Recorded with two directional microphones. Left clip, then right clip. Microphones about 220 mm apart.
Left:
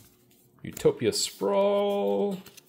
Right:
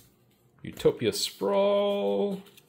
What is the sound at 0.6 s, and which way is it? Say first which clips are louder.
Speech: left 1 dB; 10° left (ahead or behind).